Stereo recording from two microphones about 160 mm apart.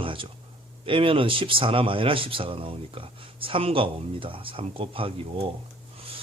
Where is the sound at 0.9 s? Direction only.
35° right (ahead or behind).